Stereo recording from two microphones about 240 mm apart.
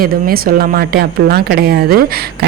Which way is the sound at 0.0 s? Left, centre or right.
Right.